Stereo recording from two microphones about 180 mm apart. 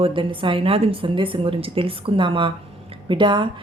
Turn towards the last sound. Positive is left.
turn(degrees=-25)  # may be behind; listen again after turning